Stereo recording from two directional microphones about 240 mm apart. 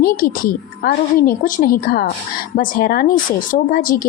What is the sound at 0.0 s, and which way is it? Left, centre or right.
Speech, left.